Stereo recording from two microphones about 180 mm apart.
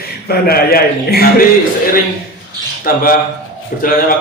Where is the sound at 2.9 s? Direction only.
50° left (ahead or behind).